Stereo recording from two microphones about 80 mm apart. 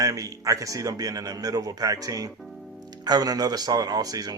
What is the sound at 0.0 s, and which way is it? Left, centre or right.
Speech, right.